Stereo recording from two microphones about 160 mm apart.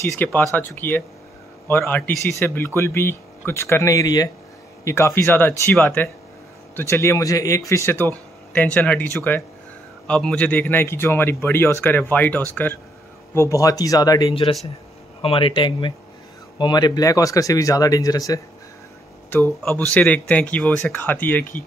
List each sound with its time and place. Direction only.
0.2 s speech: 15° left (ahead or behind)